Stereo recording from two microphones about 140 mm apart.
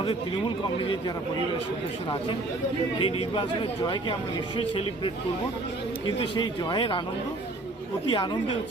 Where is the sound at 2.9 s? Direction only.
40° left (ahead or behind).